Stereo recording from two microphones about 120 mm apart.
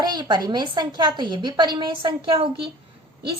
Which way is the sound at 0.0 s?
35° right (ahead or behind).